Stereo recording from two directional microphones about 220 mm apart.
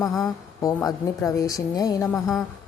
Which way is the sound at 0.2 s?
15° left (ahead or behind).